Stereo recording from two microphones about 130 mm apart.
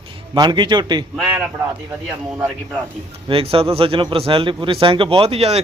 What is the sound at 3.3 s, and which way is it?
Speech, 45° right (ahead or behind).